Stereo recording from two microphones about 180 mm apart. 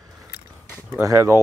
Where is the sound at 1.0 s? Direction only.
15° right (ahead or behind).